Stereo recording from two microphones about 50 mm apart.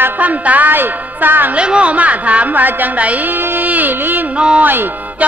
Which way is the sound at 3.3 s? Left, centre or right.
Right.